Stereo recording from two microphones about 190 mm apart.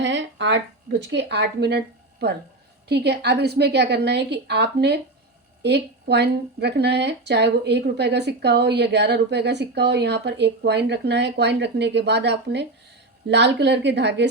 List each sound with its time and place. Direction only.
0.0 s speech: 70° right (ahead or behind)
2.9 s speech: 60° right (ahead or behind)